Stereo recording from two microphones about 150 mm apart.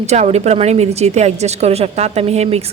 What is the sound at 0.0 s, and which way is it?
A woman's voice, 50° right (ahead or behind).